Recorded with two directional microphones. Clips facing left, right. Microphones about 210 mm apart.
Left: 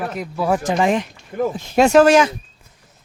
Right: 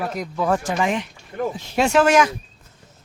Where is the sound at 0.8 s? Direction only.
35° left (ahead or behind).